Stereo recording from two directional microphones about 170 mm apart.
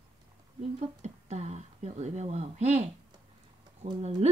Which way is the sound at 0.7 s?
40° right (ahead or behind).